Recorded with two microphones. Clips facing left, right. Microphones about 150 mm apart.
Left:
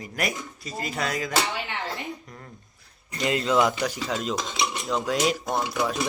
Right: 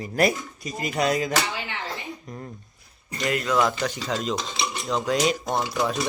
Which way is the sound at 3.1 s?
25° left (ahead or behind).